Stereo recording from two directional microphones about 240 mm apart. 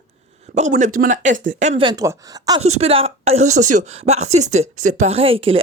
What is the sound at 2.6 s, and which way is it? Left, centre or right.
A woman's voice, right.